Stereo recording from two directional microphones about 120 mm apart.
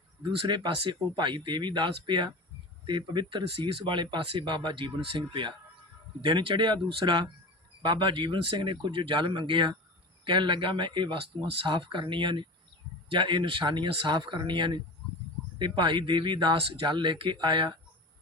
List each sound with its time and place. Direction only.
0.2 s speech: 40° right (ahead or behind)